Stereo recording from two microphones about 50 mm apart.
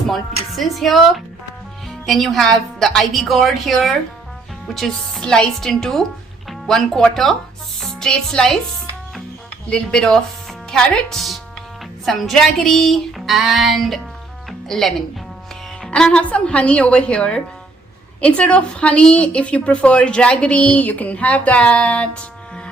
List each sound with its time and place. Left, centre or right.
0.1 s music: centre
5.2 s a woman's voice: centre
6.5 s music: centre
7.1 s a woman's voice: centre
7.8 s music: centre
9.6 s a woman's voice: centre
12.0 s music: centre
14.7 s a woman's voice: centre
15.9 s a woman's voice: centre